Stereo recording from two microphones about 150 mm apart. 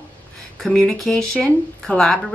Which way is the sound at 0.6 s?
5° left (ahead or behind).